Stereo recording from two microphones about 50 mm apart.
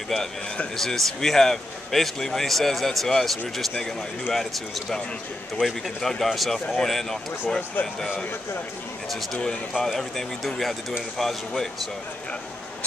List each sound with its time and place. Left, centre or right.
0.7 s a man's voice: centre
5.9 s a man's voice: centre
9.8 s speech: centre